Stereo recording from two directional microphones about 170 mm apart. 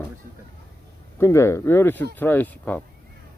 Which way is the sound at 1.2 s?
15° left (ahead or behind).